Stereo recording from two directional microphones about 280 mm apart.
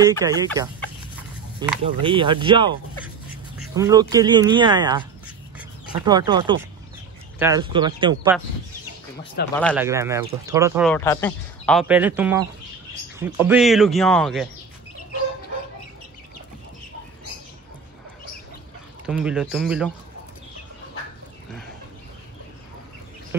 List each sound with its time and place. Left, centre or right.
0.0 s speech: centre
9.4 s speech: left
9.8 s speech: centre
10.9 s speech: centre
19.0 s speech: centre